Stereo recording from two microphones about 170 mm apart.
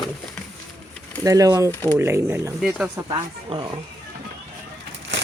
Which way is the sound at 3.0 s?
30° right (ahead or behind).